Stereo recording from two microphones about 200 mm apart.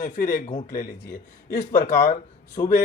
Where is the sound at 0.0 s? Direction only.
40° left (ahead or behind).